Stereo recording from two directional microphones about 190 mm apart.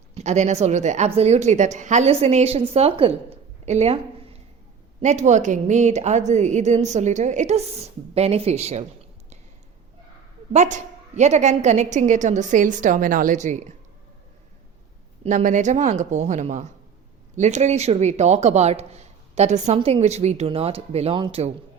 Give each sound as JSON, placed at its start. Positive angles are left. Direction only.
{"t": 0.1, "sound": "a woman's voice", "side_deg": -35}
{"t": 10.5, "sound": "a woman's voice", "side_deg": -40}
{"t": 15.2, "sound": "a woman's voice", "side_deg": -40}